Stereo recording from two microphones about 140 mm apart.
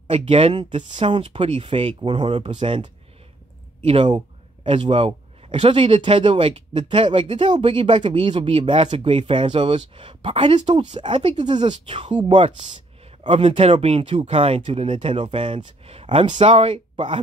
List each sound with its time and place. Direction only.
0.1 s speech: 50° right (ahead or behind)
2.0 s speech: 35° right (ahead or behind)